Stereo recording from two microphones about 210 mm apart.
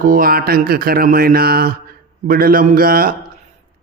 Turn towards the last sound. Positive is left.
turn(degrees=-45)  # may be behind; listen again after turning